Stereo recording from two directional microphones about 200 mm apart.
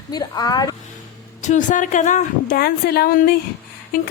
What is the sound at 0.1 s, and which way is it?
Speech, 20° left (ahead or behind).